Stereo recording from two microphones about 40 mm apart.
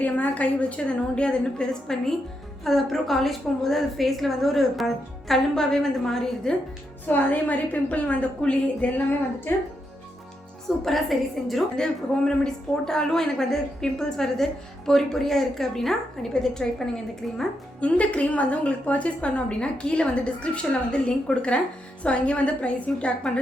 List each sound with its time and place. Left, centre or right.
0.0 s a woman's voice: left
2.6 s a woman's voice: centre
7.1 s a woman's voice: left
9.5 s speech: left
10.8 s a woman's voice: centre
11.8 s a woman's voice: centre
17.7 s a woman's voice: left